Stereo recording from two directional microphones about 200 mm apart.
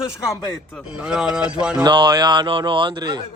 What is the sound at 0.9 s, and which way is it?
Speech, 5° right (ahead or behind).